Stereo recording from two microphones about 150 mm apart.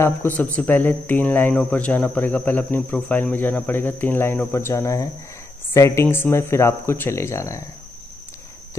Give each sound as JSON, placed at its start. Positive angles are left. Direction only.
{"t": 0.0, "sound": "speech", "side_deg": 15}